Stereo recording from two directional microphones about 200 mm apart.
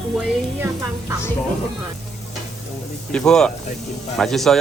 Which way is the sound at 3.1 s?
5° left (ahead or behind).